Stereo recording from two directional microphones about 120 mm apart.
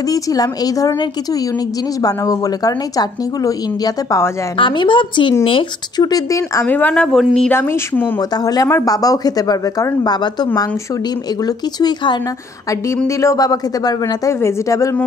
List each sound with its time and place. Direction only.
0.1 s a woman's voice: 30° left (ahead or behind)
4.6 s a woman's voice: 45° left (ahead or behind); by 6.7 s 25° left (ahead or behind)
6.7 s speech: 10° left (ahead or behind)
7.5 s speech: 20° left (ahead or behind)
8.2 s a woman's voice: 35° left (ahead or behind)
12.9 s speech: 25° left (ahead or behind)